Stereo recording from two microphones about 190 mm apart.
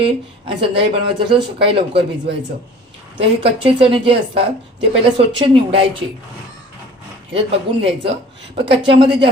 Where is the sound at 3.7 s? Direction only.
25° right (ahead or behind).